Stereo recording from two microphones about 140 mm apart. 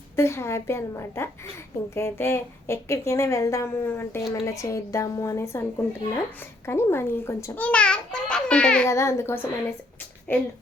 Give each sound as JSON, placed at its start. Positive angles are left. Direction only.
{"t": 0.2, "sound": "a woman's voice", "side_deg": 20}
{"t": 8.9, "sound": "a child's voice", "side_deg": 20}